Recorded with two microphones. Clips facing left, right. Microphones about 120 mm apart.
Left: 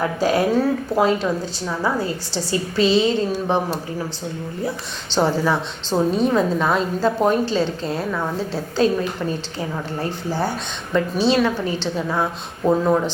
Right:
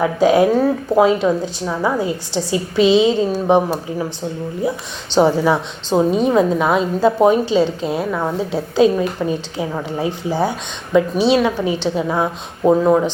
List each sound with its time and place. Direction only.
0.3 s a woman's voice: 15° right (ahead or behind)
5.1 s a woman's voice: 15° right (ahead or behind)
8.8 s a woman's voice: 10° right (ahead or behind)